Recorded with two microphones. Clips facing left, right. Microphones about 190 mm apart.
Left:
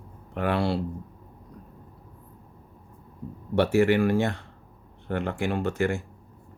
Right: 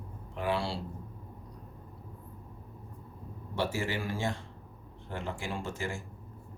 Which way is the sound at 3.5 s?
65° left (ahead or behind).